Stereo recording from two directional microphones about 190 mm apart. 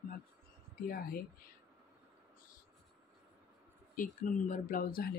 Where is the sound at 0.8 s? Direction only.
50° left (ahead or behind).